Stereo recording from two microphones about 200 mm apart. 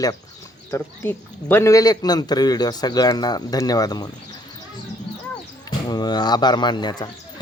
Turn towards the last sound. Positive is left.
turn(degrees=20)  # may be behind; listen again after turning